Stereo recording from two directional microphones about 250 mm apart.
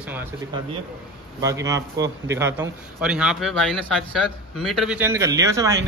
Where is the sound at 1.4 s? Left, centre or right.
Centre.